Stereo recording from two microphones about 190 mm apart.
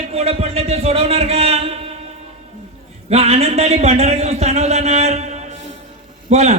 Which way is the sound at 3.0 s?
35° right (ahead or behind).